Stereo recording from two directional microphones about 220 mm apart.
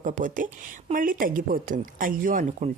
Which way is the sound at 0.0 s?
35° right (ahead or behind).